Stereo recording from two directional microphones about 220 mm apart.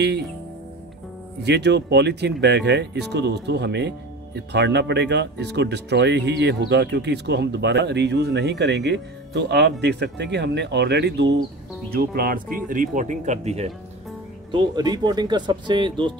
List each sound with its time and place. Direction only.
1.4 s speech: 50° right (ahead or behind); by 13.7 s 30° right (ahead or behind)
14.5 s speech: 20° right (ahead or behind)